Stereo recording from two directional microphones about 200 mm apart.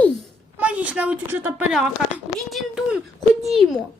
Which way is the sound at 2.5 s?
Centre (ahead or behind).